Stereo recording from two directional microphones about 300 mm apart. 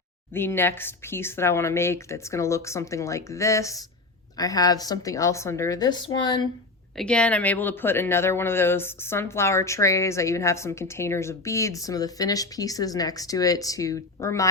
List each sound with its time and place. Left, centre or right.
0.3 s speech: centre
6.9 s speech: centre